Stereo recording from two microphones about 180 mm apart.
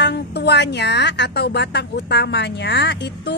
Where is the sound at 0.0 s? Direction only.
65° left (ahead or behind).